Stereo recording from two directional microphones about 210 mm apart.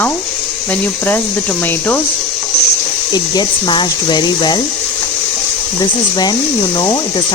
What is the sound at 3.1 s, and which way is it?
Speech, 20° left (ahead or behind).